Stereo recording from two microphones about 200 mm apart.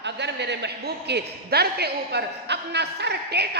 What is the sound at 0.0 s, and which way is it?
A man's voice, 60° right (ahead or behind).